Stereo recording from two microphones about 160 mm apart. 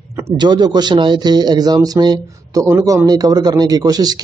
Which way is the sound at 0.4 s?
25° right (ahead or behind).